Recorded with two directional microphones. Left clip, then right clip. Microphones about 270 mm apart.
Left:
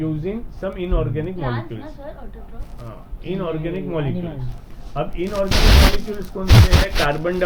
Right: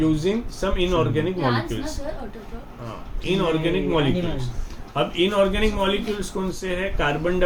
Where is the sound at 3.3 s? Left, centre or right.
Right.